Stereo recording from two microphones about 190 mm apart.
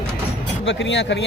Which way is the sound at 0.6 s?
70° left (ahead or behind).